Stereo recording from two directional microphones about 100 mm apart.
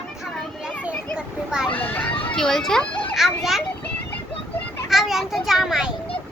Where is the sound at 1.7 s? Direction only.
15° left (ahead or behind).